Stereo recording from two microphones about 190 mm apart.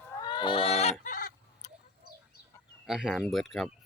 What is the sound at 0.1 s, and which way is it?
Chicken, 20° left (ahead or behind).